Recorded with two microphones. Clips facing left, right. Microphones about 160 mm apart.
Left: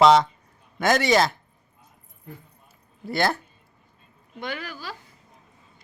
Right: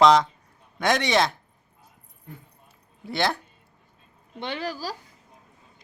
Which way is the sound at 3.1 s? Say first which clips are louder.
Left 2 dB; centre (ahead or behind).